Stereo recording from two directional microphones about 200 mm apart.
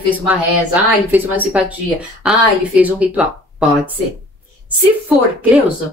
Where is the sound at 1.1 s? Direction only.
10° right (ahead or behind).